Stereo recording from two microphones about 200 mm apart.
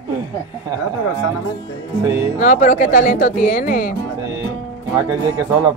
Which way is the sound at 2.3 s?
40° left (ahead or behind).